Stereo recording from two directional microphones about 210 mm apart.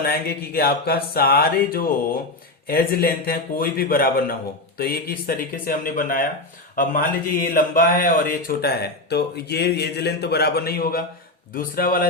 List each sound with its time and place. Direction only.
0.0 s speech: 45° left (ahead or behind)